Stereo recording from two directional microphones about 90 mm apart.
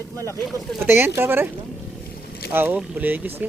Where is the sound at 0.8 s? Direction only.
20° right (ahead or behind).